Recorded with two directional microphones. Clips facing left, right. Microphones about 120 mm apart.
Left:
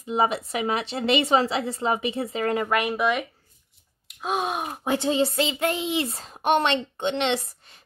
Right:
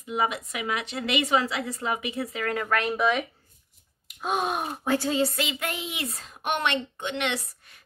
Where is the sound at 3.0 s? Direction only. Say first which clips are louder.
Left 1 dB; centre (ahead or behind).